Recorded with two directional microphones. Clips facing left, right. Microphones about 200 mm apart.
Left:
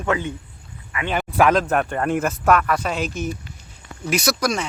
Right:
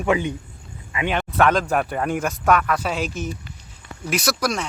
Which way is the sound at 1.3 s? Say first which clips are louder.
Left 2 dB; 5° left (ahead or behind).